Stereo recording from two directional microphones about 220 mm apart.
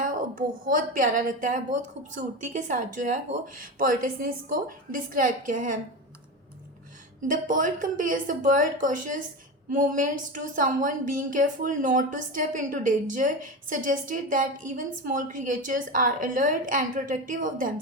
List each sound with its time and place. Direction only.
0.0 s a woman's voice: 40° right (ahead or behind)
7.2 s a woman's voice: 35° right (ahead or behind)